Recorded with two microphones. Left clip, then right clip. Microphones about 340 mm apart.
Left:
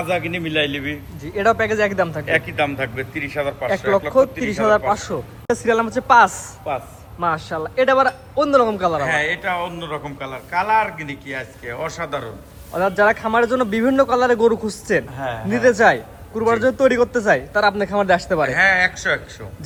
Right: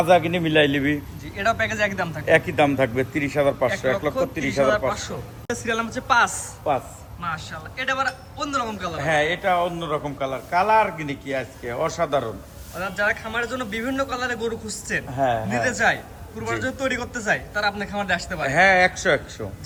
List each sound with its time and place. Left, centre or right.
0.0 s a man's voice: right
1.2 s speech: centre
2.2 s a man's voice: right
4.1 s speech: centre
6.7 s a man's voice: right
7.2 s speech: centre
9.0 s a man's voice: centre
12.8 s a man's voice: centre
15.1 s a man's voice: right
15.4 s speech: centre
18.4 s a man's voice: centre